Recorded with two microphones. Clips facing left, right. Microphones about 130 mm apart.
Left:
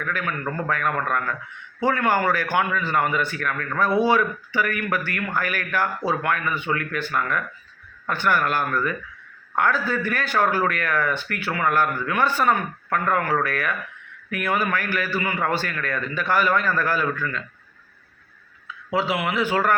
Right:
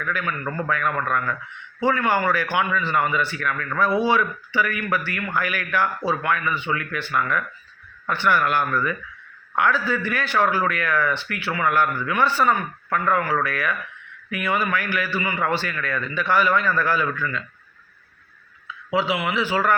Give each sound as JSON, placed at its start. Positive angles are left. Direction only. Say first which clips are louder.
{"t": 0.0, "sound": "a man's voice", "louder": "even", "side_deg": 45}
{"t": 18.9, "sound": "a man's voice", "louder": "even", "side_deg": 45}